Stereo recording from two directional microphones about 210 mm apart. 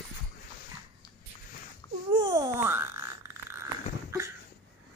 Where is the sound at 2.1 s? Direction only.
20° right (ahead or behind).